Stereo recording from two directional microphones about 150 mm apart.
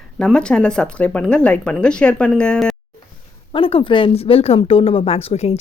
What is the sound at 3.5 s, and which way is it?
Speech, 35° left (ahead or behind).